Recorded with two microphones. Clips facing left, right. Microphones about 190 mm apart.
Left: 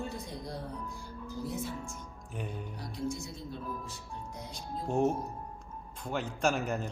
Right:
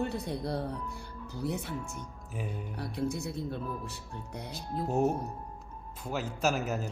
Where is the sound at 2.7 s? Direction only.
60° right (ahead or behind).